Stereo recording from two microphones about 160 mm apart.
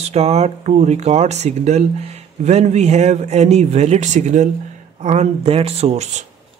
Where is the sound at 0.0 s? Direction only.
40° right (ahead or behind).